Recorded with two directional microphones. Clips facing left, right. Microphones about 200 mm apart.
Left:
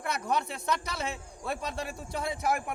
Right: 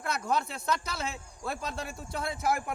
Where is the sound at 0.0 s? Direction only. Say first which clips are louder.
Even; 15° left (ahead or behind).